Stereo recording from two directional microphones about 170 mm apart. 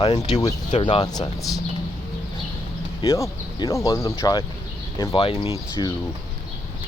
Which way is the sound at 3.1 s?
20° left (ahead or behind).